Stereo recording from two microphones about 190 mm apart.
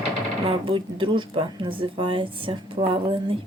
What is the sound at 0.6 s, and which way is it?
Speech, 25° right (ahead or behind).